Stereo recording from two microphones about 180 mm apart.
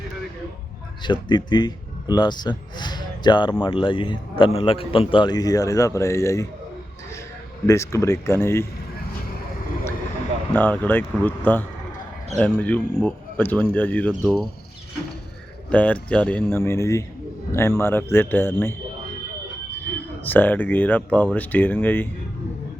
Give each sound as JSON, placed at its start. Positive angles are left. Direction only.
{"t": 1.0, "sound": "a man's voice", "side_deg": 25}
{"t": 7.7, "sound": "speech", "side_deg": 15}
{"t": 10.5, "sound": "speech", "side_deg": 10}
{"t": 15.7, "sound": "speech", "side_deg": 5}
{"t": 20.2, "sound": "speech", "side_deg": 10}